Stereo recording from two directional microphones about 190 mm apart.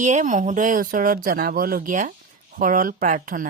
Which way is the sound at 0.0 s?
40° right (ahead or behind).